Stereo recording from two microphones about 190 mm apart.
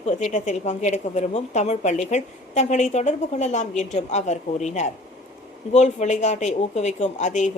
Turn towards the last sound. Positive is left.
turn(degrees=40)  # may be behind; listen again after turning